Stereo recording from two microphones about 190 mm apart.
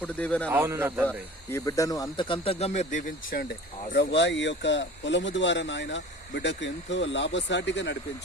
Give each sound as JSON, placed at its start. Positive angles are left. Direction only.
{"t": 0.0, "sound": "a man's voice", "side_deg": 5}
{"t": 0.5, "sound": "a man's voice", "side_deg": -10}
{"t": 1.0, "sound": "speech", "side_deg": 15}
{"t": 3.9, "sound": "speech", "side_deg": 70}